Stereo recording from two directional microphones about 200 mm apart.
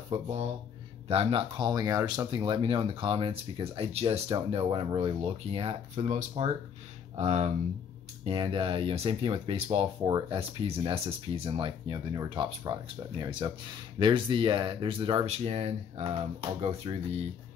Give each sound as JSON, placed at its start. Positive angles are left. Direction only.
{"t": 0.1, "sound": "speech", "side_deg": -30}